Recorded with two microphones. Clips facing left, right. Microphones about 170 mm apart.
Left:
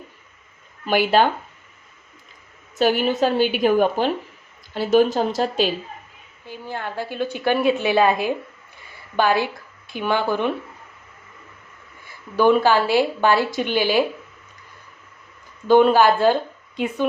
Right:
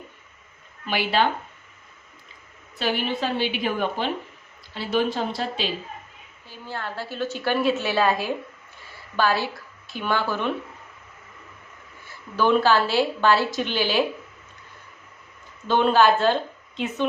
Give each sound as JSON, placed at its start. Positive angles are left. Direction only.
{"t": 0.9, "sound": "a woman's voice", "side_deg": 45}
{"t": 2.7, "sound": "a woman's voice", "side_deg": 45}
{"t": 6.7, "sound": "a woman's voice", "side_deg": 15}
{"t": 12.5, "sound": "a woman's voice", "side_deg": 15}
{"t": 15.8, "sound": "speech", "side_deg": 10}